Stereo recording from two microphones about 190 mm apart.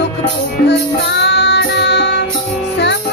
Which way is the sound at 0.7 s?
65° left (ahead or behind).